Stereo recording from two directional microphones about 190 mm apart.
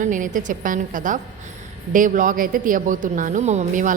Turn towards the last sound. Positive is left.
turn(degrees=-40)  # may be behind; listen again after turning